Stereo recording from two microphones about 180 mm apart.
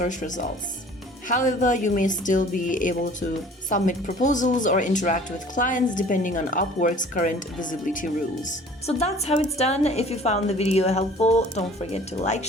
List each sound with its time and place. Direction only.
0.0 s speech: 45° left (ahead or behind)